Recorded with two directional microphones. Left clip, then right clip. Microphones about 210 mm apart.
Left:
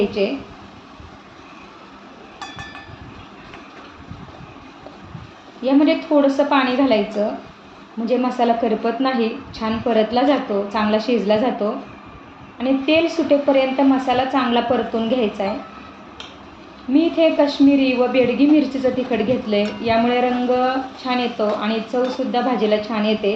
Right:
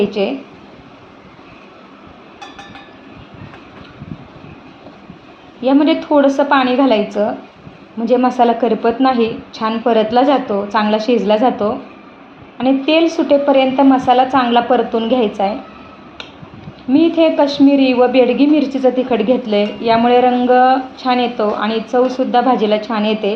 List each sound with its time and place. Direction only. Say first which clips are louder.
0.2 s a woman's voice: right 3 dB; 40° right (ahead or behind)
5.6 s a woman's voice: right 4 dB; 35° right (ahead or behind)
16.9 s a woman's voice: right 4 dB; 35° right (ahead or behind)